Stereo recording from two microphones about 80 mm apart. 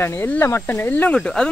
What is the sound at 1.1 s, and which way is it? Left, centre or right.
Speech, centre.